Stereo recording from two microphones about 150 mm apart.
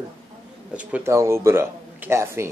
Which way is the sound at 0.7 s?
15° right (ahead or behind).